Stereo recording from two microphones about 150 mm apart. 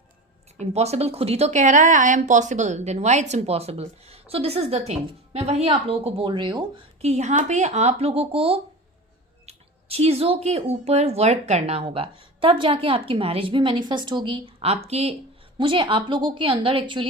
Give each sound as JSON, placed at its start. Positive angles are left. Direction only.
{"t": 0.6, "sound": "a woman's voice", "side_deg": -45}
{"t": 7.0, "sound": "a woman's voice", "side_deg": -50}